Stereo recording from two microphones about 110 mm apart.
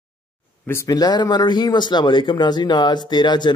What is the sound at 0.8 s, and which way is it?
A man's voice, 35° left (ahead or behind).